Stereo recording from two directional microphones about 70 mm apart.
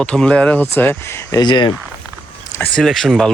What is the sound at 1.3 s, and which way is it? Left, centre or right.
Speech, left.